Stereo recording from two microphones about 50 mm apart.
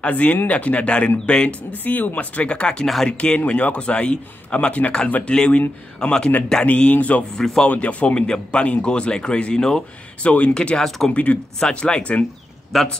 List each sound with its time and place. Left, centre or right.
0.0 s a man's voice: left
1.7 s a man's voice: left
2.8 s a man's voice: centre
3.1 s a man's voice: left
6.6 s a man's voice: left
7.3 s a man's voice: centre
7.6 s a man's voice: left
10.2 s a man's voice: left
12.7 s a man's voice: centre